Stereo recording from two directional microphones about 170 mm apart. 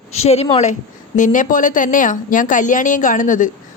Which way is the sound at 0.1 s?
40° left (ahead or behind).